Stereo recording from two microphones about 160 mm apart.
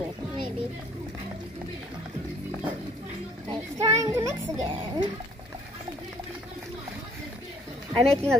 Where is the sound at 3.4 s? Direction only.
20° right (ahead or behind).